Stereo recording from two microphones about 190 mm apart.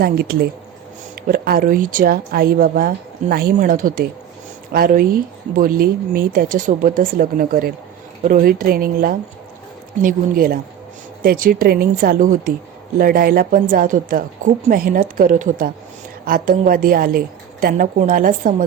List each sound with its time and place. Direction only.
0.0 s a woman's voice: 55° right (ahead or behind)